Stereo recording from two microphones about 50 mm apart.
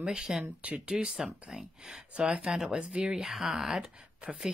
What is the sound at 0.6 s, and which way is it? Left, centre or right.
Speech, right.